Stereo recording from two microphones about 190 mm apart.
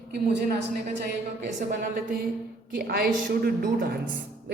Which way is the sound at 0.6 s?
65° right (ahead or behind).